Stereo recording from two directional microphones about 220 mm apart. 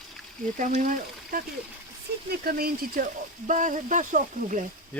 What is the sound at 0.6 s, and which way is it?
Speech, 35° right (ahead or behind).